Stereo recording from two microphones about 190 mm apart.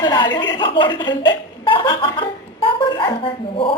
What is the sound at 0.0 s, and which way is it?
Speech, 25° left (ahead or behind).